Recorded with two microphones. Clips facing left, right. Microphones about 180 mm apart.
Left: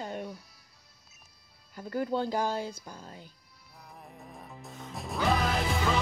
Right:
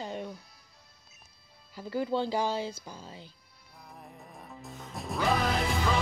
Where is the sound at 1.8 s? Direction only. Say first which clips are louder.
Even; centre (ahead or behind).